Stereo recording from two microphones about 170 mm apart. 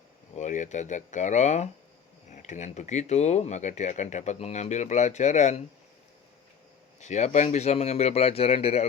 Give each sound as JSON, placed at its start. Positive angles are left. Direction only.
{"t": 0.3, "sound": "speech", "side_deg": 45}
{"t": 7.0, "sound": "speech", "side_deg": 45}